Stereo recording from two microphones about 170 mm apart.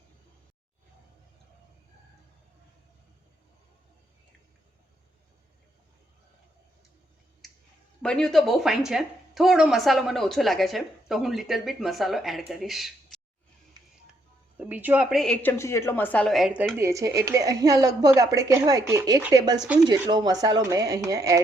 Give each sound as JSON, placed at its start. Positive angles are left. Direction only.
{"t": 8.0, "sound": "a woman's voice", "side_deg": 5}
{"t": 14.6, "sound": "speech", "side_deg": -10}
{"t": 15.2, "sound": "a woman's voice", "side_deg": 5}
{"t": 16.7, "sound": "a woman's voice", "side_deg": -15}